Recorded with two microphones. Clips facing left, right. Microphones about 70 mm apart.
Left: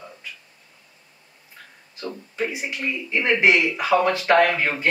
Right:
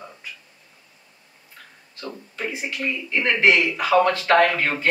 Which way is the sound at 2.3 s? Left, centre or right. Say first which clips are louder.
Left 2 dB; centre.